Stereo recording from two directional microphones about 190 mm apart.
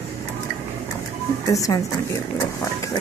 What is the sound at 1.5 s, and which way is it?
Speech, 15° left (ahead or behind).